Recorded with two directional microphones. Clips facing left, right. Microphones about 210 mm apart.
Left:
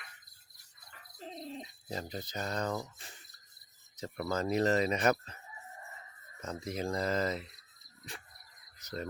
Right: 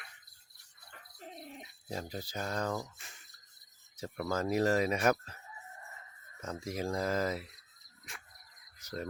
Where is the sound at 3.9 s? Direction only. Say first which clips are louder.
Even; 5° right (ahead or behind).